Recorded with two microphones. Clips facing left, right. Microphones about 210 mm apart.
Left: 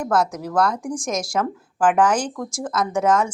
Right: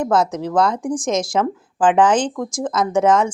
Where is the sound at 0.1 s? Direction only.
20° right (ahead or behind).